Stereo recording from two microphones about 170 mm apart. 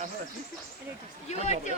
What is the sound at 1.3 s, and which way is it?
Speech, 40° left (ahead or behind).